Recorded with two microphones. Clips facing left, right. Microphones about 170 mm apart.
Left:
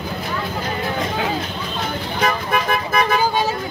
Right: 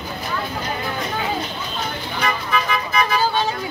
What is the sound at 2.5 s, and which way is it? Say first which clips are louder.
Vehicle: left 2 dB; 50° left (ahead or behind).